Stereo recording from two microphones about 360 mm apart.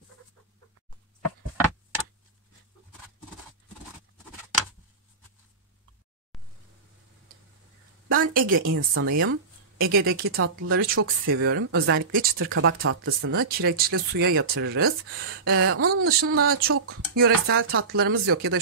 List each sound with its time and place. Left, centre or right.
8.2 s speech: right
13.5 s speech: right